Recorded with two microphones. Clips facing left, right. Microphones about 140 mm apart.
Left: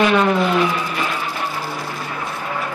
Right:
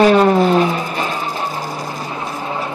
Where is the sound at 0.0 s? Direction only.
35° right (ahead or behind).